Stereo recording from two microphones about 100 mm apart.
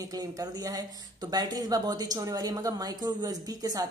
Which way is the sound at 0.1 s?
40° right (ahead or behind).